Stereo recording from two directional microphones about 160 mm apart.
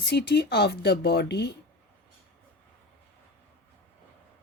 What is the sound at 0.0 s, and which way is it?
Speech, 90° left.